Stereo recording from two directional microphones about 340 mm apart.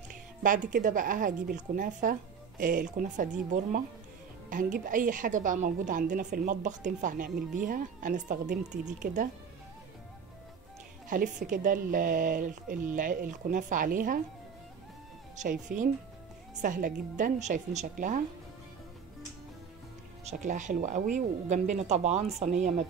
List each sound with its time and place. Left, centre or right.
0.1 s a woman's voice: right
11.1 s a woman's voice: right
15.7 s a woman's voice: right
20.2 s a woman's voice: right